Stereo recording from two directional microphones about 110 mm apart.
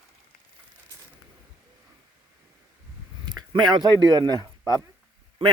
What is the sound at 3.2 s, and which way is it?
Speech, 45° right (ahead or behind).